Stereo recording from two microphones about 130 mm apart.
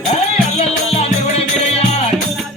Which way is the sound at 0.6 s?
50° left (ahead or behind).